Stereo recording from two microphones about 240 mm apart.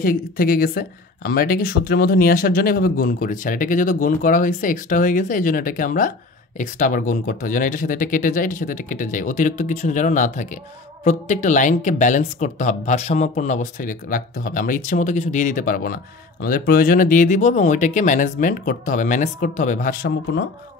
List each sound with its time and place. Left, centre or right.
0.0 s speech: left